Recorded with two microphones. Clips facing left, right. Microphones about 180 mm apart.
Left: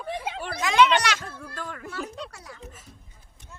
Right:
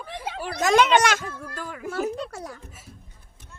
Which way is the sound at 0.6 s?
45° right (ahead or behind).